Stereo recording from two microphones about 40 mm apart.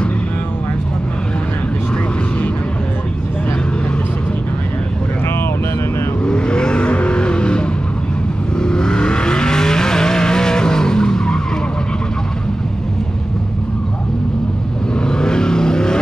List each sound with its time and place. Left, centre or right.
6.2 s vehicle: left
15.0 s vehicle: centre